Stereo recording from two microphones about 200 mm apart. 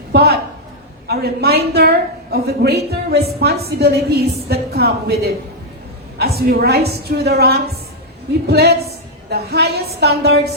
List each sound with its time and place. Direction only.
0.1 s a man's voice: 50° right (ahead or behind)